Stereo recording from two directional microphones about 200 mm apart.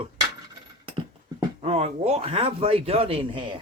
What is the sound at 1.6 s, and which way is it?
A man's voice, 30° right (ahead or behind).